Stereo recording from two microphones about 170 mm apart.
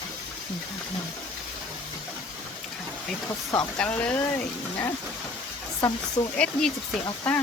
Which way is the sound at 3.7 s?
5° left (ahead or behind).